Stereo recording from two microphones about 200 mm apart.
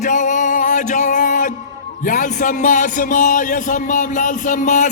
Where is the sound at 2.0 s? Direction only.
40° left (ahead or behind).